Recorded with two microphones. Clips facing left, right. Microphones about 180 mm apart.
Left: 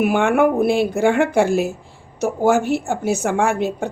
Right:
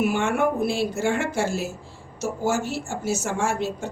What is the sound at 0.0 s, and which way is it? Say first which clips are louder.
A woman's voice: left 6 dB; 55° left (ahead or behind).